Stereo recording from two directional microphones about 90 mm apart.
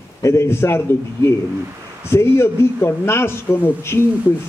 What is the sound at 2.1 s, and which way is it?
Speech, 25° left (ahead or behind).